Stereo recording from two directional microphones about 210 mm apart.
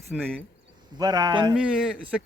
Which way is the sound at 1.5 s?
5° right (ahead or behind).